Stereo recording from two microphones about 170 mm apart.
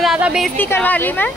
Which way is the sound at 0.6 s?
10° left (ahead or behind).